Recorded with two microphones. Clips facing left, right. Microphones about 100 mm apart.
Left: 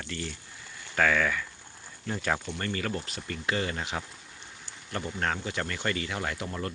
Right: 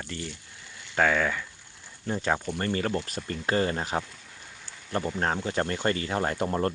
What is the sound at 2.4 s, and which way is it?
Speech, 35° right (ahead or behind).